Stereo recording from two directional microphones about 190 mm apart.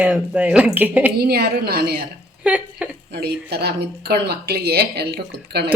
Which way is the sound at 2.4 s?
5° right (ahead or behind).